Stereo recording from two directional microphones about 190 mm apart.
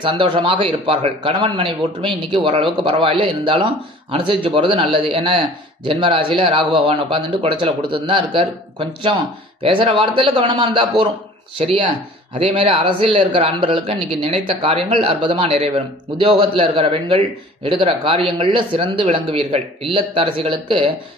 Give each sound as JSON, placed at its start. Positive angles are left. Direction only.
{"t": 0.0, "sound": "speech", "side_deg": -25}